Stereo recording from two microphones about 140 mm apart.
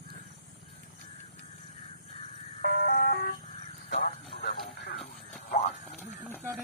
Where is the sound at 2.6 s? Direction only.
90° left.